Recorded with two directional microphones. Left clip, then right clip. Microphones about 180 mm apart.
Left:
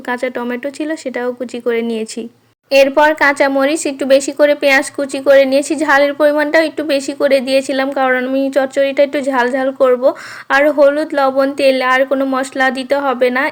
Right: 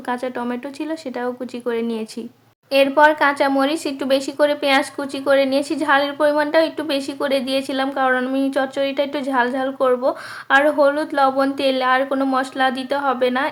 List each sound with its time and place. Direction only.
0.1 s speech: 15° left (ahead or behind)